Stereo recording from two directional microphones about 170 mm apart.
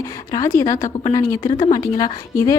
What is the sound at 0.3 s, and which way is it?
A woman's voice, 20° left (ahead or behind).